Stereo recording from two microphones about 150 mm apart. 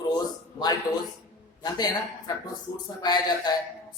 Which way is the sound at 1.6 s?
25° left (ahead or behind).